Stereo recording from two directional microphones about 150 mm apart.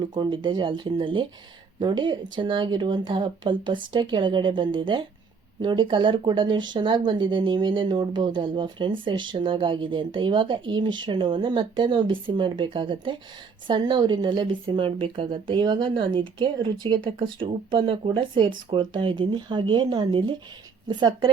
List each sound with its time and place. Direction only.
0.0 s a woman's voice: 30° right (ahead or behind)